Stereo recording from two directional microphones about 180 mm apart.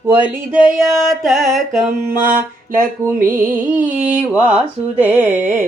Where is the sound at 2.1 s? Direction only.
50° right (ahead or behind).